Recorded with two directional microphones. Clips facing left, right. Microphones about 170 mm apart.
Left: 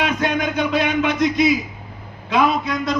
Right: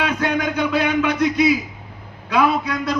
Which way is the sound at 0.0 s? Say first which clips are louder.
Even; 20° left (ahead or behind).